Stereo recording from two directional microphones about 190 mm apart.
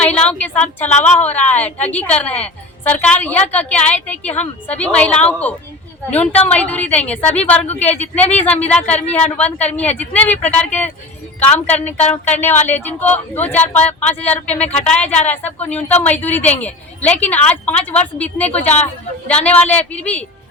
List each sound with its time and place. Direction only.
0.0 s a woman's voice: 5° left (ahead or behind)
18.6 s speech: 35° left (ahead or behind)
19.5 s a woman's voice: 10° left (ahead or behind)